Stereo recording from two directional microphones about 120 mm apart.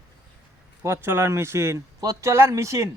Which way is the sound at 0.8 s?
20° right (ahead or behind).